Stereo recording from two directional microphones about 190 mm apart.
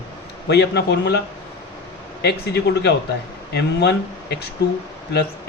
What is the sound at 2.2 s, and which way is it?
Speech, 60° left (ahead or behind).